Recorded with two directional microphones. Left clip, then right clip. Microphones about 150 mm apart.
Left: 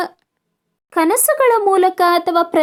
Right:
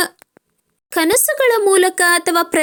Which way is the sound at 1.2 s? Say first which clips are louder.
Left 1 dB; 30° right (ahead or behind).